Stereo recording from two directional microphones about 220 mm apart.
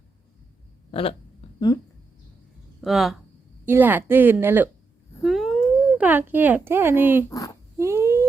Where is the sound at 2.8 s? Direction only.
Centre (ahead or behind).